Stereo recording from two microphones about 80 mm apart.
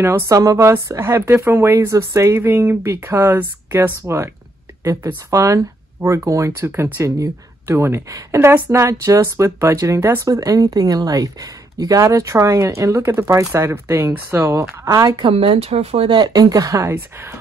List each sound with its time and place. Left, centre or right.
0.3 s speech: right
4.8 s speech: right
10.2 s speech: right
15.1 s speech: right
16.1 s speech: right
16.8 s speech: right